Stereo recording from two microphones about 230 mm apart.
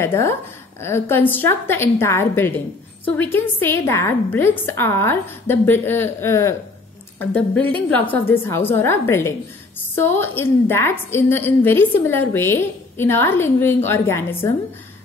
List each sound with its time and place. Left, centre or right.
0.0 s a woman's voice: centre